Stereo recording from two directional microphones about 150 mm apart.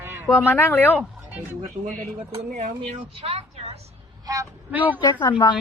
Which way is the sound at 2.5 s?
50° right (ahead or behind).